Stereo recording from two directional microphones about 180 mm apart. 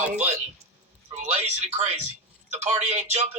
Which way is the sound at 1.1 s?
35° right (ahead or behind).